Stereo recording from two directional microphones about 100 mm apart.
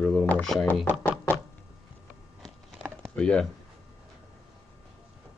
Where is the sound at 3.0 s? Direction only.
10° left (ahead or behind).